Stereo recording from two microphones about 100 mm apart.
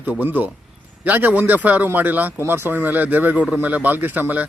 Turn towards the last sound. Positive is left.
turn(degrees=-15)  # may be behind; listen again after turning